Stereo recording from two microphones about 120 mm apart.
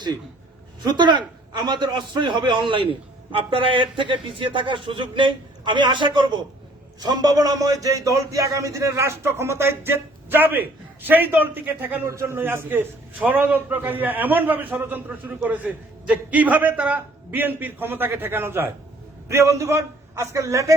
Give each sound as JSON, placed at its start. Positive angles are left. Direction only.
{"t": 0.8, "sound": "a man's voice", "side_deg": -40}